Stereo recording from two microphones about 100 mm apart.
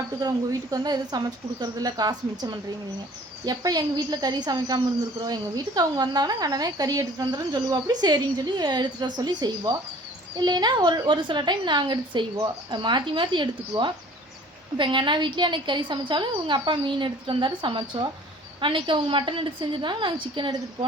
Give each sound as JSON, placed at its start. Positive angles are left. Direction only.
{"t": 0.2, "sound": "a woman's voice", "side_deg": -40}